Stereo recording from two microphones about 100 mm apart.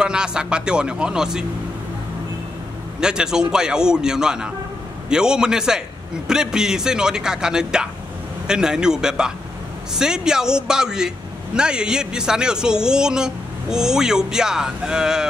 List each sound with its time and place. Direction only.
0.0 s a man's voice: 10° right (ahead or behind)
3.0 s a man's voice: 5° right (ahead or behind)